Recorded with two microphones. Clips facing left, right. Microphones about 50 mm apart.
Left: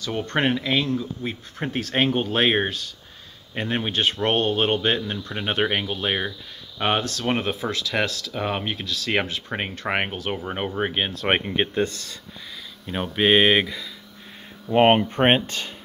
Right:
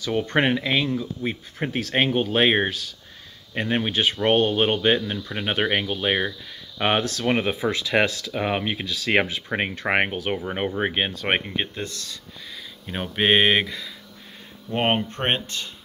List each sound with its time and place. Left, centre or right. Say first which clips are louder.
0.0 s speech: right 2 dB; centre
11.2 s speech: left 4 dB; centre
11.5 s speech: left 5 dB; centre
11.8 s speech: left 7 dB; left
12.8 s speech: left 1 dB; centre
14.7 s speech: left 6 dB; centre